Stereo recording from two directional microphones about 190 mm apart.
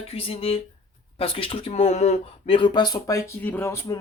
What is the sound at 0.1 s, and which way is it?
Speech, 30° left (ahead or behind).